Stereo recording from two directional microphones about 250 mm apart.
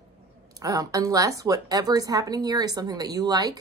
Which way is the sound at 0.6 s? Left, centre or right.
Centre.